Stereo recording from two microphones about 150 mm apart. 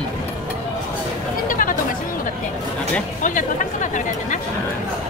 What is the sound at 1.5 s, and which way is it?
Chatter, 65° left (ahead or behind).